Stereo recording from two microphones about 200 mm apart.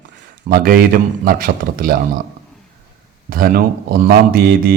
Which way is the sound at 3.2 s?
45° right (ahead or behind).